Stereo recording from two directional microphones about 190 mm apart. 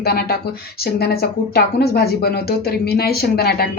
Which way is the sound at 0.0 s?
55° left (ahead or behind).